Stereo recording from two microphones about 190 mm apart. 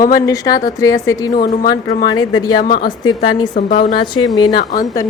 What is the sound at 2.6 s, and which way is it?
Speech, 50° left (ahead or behind).